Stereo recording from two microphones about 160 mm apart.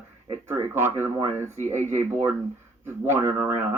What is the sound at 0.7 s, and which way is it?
Speech, 15° right (ahead or behind).